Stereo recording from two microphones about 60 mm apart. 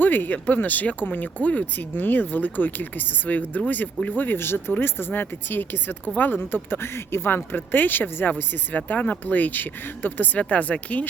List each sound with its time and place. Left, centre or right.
0.0 s speech: left